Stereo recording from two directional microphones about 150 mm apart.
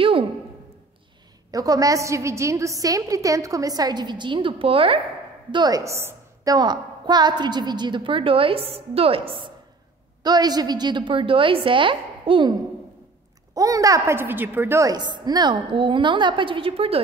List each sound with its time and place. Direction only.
0.0 s a sound: 35° right (ahead or behind)
1.5 s a woman's voice: 25° right (ahead or behind)
5.5 s a woman's voice: 25° right (ahead or behind)
10.2 s a woman's voice: 25° right (ahead or behind)
13.6 s a woman's voice: 20° right (ahead or behind); by 17.0 s 40° right (ahead or behind)